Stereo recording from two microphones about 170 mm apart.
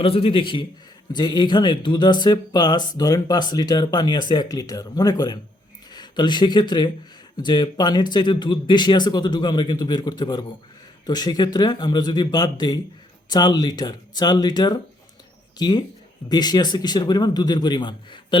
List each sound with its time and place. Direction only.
0.0 s a man's voice: 35° left (ahead or behind)